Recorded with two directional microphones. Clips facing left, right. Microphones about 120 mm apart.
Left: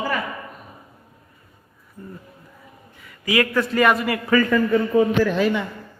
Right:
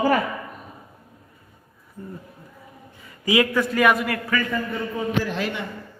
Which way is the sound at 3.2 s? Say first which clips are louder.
Right 1 dB; 20° right (ahead or behind).